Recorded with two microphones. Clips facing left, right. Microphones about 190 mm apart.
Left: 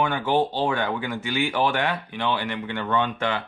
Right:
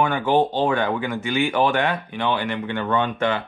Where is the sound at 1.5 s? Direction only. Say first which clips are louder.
Right 3 dB; 50° right (ahead or behind).